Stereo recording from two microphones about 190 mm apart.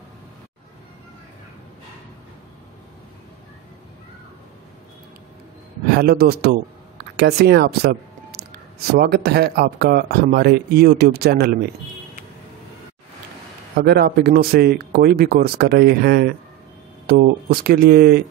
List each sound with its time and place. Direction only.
5.9 s speech: 55° right (ahead or behind)
13.7 s speech: 55° right (ahead or behind)